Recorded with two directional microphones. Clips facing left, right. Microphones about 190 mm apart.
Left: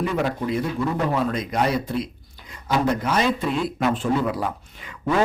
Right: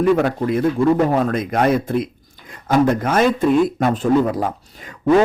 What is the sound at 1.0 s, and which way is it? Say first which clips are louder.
A man's voice: right 5 dB; 45° right (ahead or behind).